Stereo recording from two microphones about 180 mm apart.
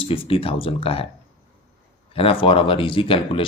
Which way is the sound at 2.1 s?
30° left (ahead or behind).